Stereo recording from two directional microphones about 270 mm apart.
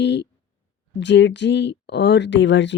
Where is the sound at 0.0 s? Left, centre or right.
Left.